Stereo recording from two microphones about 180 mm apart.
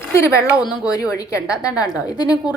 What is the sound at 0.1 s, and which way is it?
A woman's voice, 15° left (ahead or behind).